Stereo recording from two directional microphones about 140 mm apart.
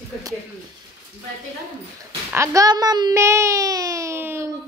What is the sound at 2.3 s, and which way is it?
Speech, 20° right (ahead or behind).